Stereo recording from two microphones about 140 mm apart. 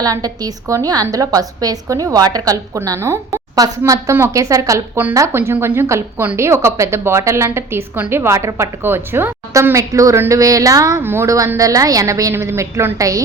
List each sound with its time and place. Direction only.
0.0 s a woman's voice: 25° right (ahead or behind)